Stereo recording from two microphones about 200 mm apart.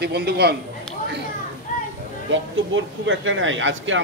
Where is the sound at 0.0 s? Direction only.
55° right (ahead or behind).